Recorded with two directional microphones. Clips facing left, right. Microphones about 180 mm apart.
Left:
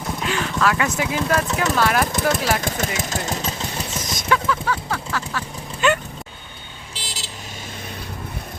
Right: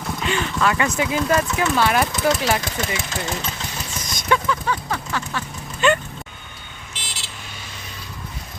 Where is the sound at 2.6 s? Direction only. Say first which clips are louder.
Left 2 dB; 50° left (ahead or behind); by 4.0 s 30° left (ahead or behind).